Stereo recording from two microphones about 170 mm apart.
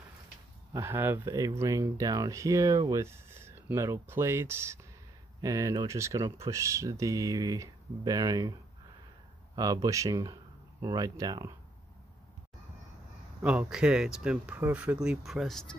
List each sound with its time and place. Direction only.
0.7 s speech: 15° right (ahead or behind)
9.6 s speech: 20° right (ahead or behind)
13.4 s speech: 5° right (ahead or behind)